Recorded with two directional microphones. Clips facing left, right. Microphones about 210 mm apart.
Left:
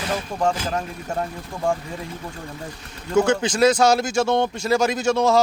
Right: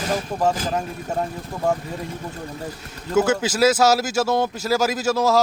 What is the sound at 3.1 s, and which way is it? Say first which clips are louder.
Speech: even; 5° right (ahead or behind).